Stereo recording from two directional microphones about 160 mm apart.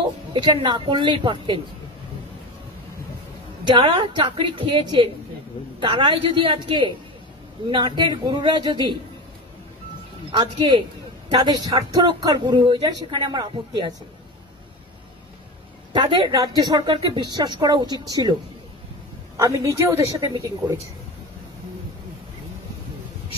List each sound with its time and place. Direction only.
0.3 s a woman's voice: 30° right (ahead or behind)
3.6 s a woman's voice: 30° right (ahead or behind)
10.6 s a woman's voice: 30° right (ahead or behind)
15.9 s speech: 30° right (ahead or behind)
19.3 s speech: 20° right (ahead or behind)